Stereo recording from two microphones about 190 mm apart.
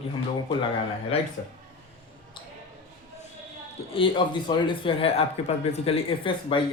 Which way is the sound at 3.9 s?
25° left (ahead or behind).